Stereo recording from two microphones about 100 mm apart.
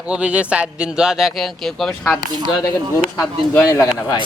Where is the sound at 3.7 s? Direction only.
35° left (ahead or behind).